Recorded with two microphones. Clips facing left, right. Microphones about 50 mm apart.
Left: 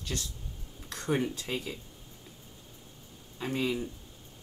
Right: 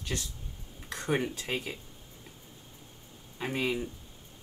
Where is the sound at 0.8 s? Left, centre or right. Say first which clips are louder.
Even; right.